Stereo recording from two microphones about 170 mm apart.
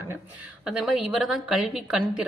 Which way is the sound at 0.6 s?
5° right (ahead or behind).